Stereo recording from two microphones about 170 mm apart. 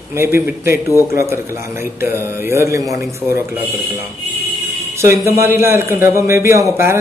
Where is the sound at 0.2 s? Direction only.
15° right (ahead or behind).